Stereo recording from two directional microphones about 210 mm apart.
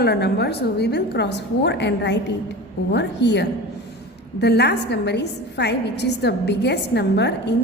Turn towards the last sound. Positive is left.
turn(degrees=55)  # may be behind; listen again after turning